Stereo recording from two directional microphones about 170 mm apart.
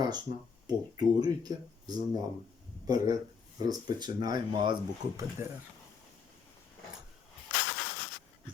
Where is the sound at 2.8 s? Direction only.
20° right (ahead or behind).